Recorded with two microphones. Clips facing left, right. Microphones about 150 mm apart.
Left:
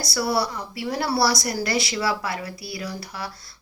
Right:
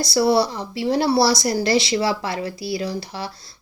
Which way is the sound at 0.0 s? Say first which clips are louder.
Right 7 dB; 25° right (ahead or behind).